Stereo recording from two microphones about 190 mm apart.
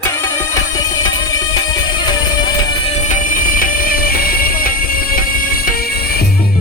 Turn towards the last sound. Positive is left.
turn(degrees=50)  # may be behind; listen again after turning